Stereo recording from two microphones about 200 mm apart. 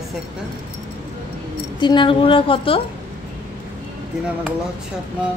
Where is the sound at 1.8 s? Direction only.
25° left (ahead or behind).